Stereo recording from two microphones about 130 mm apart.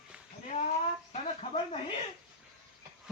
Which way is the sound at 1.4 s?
50° left (ahead or behind).